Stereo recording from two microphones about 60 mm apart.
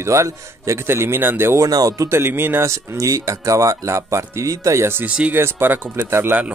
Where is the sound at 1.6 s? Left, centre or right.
Right.